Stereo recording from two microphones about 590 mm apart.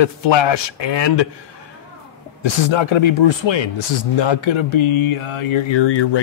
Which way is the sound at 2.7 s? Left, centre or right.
Left.